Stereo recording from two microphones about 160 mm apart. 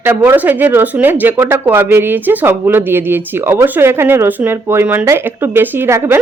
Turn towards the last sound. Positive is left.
turn(degrees=-15)  # may be behind; listen again after turning